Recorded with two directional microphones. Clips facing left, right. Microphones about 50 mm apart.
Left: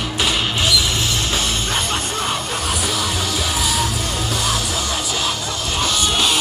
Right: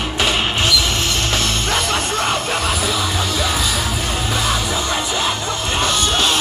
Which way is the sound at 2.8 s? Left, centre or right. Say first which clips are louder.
Right 2 dB; centre.